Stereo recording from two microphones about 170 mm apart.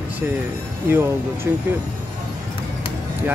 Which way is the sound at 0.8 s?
15° right (ahead or behind).